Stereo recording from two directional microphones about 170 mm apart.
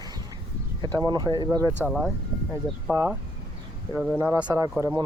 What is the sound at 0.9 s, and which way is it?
Speech, 25° right (ahead or behind).